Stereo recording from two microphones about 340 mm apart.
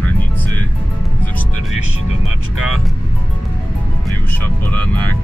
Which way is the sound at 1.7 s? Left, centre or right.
Right.